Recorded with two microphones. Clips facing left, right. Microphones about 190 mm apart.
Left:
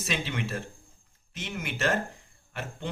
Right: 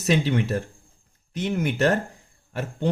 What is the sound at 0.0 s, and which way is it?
Speech, 40° right (ahead or behind).